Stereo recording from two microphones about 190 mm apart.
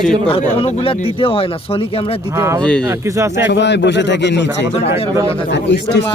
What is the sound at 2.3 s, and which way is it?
Speech, 15° right (ahead or behind).